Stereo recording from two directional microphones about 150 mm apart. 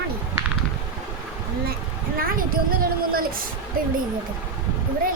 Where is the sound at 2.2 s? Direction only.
75° right (ahead or behind).